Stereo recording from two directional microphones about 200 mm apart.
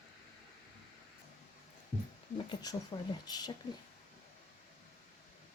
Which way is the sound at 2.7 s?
20° left (ahead or behind).